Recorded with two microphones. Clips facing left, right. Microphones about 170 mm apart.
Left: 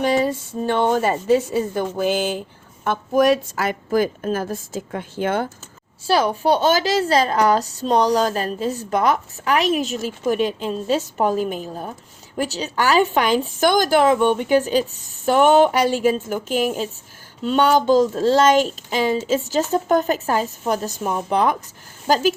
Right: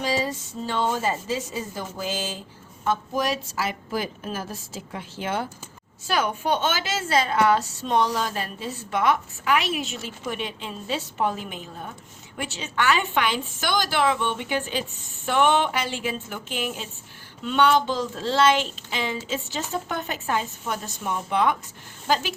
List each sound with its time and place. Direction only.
0.0 s a woman's voice: 55° left (ahead or behind)
6.1 s a woman's voice: 35° left (ahead or behind)